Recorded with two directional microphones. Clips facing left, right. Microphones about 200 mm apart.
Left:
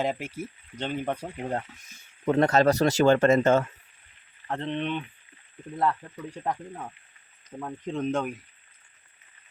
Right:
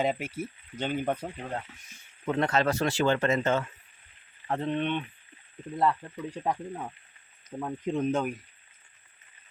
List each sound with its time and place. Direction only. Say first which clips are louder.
0.0 s speech: even; centre (ahead or behind)
2.2 s speech: left 5 dB; 40° left (ahead or behind)
4.4 s speech: right 1 dB; 5° right (ahead or behind)